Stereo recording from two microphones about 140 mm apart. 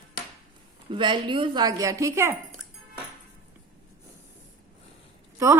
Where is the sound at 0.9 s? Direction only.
35° right (ahead or behind).